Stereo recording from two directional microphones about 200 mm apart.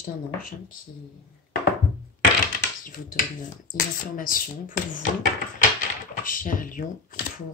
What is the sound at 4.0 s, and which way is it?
Speech, 40° left (ahead or behind).